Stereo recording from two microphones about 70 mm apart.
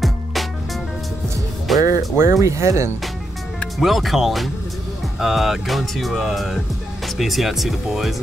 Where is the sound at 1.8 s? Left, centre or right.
Right.